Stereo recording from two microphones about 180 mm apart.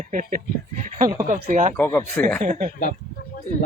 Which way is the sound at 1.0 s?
20° right (ahead or behind).